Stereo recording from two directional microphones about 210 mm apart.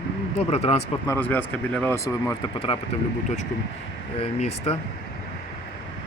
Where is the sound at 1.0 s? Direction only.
10° left (ahead or behind).